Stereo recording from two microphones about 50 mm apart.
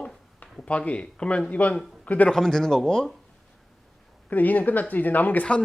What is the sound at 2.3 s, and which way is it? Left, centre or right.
Speech, centre.